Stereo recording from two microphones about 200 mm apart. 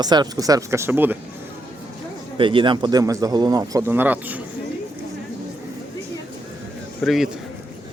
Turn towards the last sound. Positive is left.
turn(degrees=0)  # may be behind; listen again after turning